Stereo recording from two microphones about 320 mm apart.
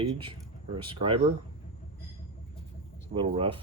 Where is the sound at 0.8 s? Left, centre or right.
Centre.